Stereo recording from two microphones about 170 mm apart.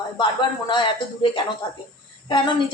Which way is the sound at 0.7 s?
30° left (ahead or behind).